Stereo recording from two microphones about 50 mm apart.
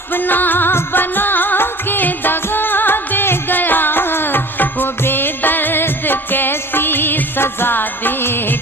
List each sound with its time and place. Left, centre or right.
0.1 s music: left